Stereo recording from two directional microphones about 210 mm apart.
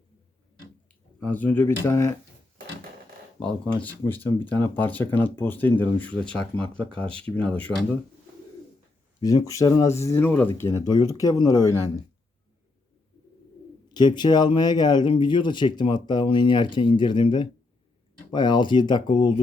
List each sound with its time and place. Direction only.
1.2 s speech: 10° left (ahead or behind)
3.4 s speech: 5° left (ahead or behind)
9.2 s speech: 15° left (ahead or behind)
13.9 s speech: 20° left (ahead or behind)